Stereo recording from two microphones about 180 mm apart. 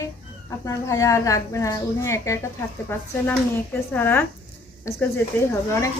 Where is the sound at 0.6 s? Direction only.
15° left (ahead or behind).